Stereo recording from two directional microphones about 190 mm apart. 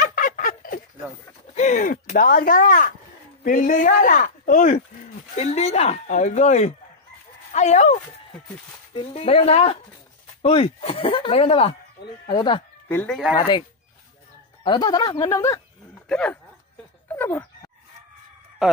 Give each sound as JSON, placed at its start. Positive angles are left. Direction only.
{"t": 0.0, "sound": "fowl", "side_deg": 45}
{"t": 1.5, "sound": "speech", "side_deg": 40}
{"t": 12.9, "sound": "speech", "side_deg": 10}
{"t": 14.6, "sound": "speech", "side_deg": 25}
{"t": 16.1, "sound": "speech", "side_deg": 5}
{"t": 17.1, "sound": "a sound", "side_deg": 10}
{"t": 18.6, "sound": "speech", "side_deg": 0}